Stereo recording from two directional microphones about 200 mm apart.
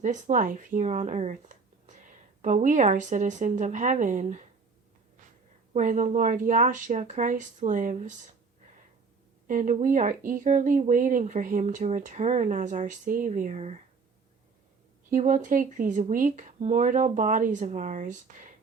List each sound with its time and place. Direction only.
0.0 s speech: 40° right (ahead or behind)
5.7 s speech: 40° right (ahead or behind)
9.5 s speech: 40° right (ahead or behind)
15.1 s speech: 40° right (ahead or behind)